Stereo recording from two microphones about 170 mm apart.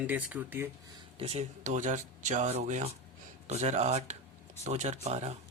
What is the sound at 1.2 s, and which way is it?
Speech, 40° right (ahead or behind).